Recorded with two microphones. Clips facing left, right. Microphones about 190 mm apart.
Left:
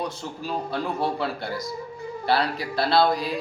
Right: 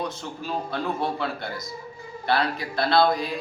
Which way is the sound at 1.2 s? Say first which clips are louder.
Left 2 dB; 35° left (ahead or behind).